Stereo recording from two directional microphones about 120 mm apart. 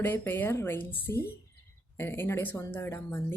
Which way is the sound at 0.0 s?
15° left (ahead or behind).